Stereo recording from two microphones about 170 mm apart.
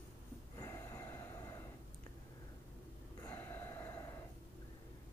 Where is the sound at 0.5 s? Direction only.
20° left (ahead or behind).